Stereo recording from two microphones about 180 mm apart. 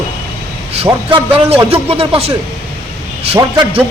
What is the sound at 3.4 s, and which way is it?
Speech, 25° right (ahead or behind).